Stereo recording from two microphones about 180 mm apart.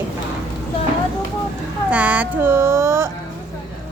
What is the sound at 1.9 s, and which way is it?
Speech, 10° right (ahead or behind).